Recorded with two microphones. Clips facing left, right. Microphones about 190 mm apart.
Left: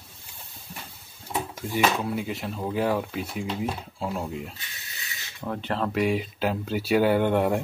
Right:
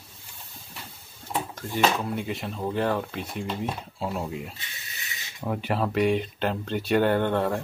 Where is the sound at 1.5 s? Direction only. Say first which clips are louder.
Even; 5° left (ahead or behind).